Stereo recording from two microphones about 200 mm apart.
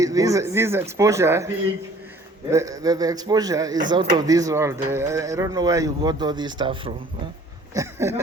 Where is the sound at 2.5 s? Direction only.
15° right (ahead or behind).